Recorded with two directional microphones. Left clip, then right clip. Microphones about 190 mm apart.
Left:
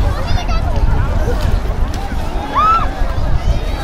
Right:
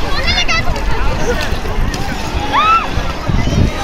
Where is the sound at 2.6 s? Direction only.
60° left (ahead or behind).